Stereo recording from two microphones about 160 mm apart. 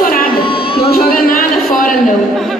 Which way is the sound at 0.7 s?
70° left (ahead or behind).